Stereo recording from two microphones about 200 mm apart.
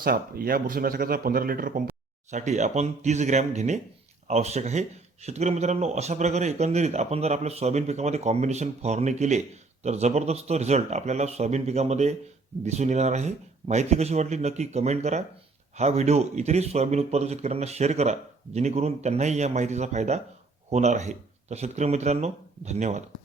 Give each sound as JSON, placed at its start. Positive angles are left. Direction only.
{"t": 0.0, "sound": "speech", "side_deg": -50}
{"t": 2.3, "sound": "speech", "side_deg": -35}